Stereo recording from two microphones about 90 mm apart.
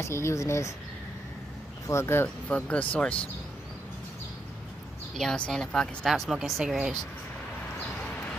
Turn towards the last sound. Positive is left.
turn(degrees=-5)  # may be behind; listen again after turning